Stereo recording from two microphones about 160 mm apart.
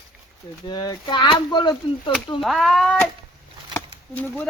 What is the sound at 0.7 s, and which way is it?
Speech, 25° left (ahead or behind).